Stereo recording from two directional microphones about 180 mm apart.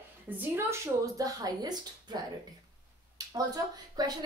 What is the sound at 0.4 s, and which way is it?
Speech, 15° right (ahead or behind).